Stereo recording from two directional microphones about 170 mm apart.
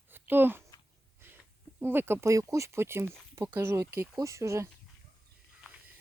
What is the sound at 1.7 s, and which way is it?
Speech, 10° right (ahead or behind).